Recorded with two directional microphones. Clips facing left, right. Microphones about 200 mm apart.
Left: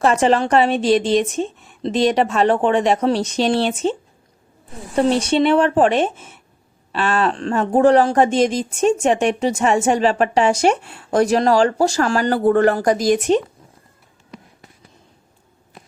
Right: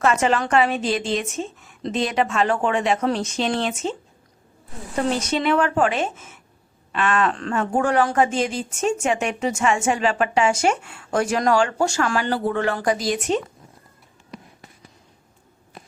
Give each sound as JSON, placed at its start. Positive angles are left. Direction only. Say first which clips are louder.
{"t": 0.0, "sound": "speech", "louder": "left 4 dB", "side_deg": 35}
{"t": 4.9, "sound": "speech", "louder": "left 7 dB", "side_deg": 30}